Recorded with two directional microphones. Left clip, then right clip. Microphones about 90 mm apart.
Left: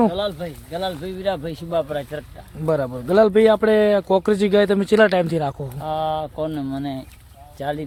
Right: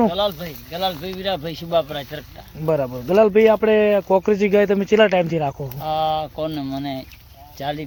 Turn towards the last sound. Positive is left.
turn(degrees=30)  # may be behind; listen again after turning